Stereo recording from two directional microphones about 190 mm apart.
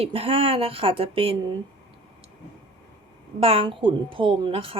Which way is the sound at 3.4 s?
30° right (ahead or behind).